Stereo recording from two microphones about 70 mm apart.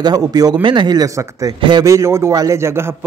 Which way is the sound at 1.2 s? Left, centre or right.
Right.